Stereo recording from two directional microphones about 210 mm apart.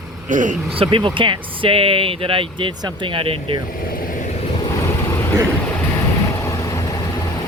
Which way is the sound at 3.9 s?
40° left (ahead or behind).